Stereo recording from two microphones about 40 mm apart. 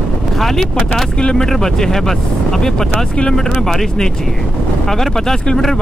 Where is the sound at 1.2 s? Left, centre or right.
Left.